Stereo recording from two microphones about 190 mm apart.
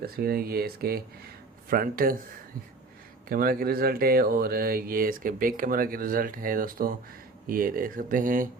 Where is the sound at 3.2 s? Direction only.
50° right (ahead or behind).